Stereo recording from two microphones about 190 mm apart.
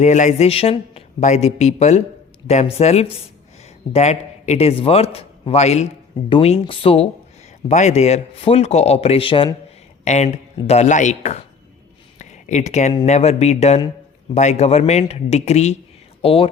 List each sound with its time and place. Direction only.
0.0 s a man's voice: 40° left (ahead or behind)
10.0 s a man's voice: 35° left (ahead or behind)
12.2 s a sound: 40° left (ahead or behind)
13.1 s a man's voice: 35° left (ahead or behind)